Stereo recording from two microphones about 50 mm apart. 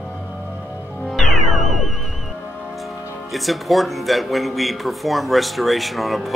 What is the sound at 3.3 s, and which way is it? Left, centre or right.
Speech, centre.